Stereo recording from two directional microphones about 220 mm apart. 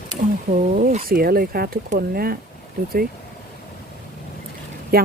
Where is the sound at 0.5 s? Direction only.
35° right (ahead or behind).